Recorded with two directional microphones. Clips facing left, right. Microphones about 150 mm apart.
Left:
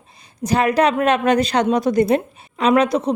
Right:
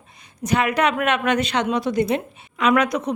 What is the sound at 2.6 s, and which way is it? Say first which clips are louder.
Speech: left 3 dB; 30° left (ahead or behind).